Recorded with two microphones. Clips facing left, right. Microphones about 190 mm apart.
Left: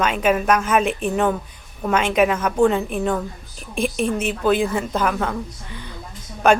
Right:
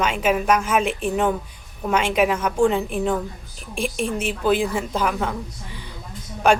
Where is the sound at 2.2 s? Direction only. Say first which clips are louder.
Left 2 dB; 10° right (ahead or behind).